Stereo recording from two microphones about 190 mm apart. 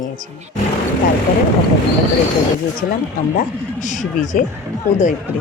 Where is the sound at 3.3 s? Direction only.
40° left (ahead or behind).